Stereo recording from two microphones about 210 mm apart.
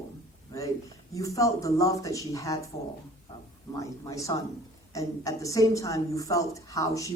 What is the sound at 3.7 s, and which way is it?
A man's voice, 15° left (ahead or behind).